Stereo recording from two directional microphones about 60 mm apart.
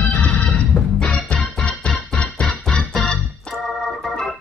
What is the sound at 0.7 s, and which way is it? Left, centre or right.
Music, left.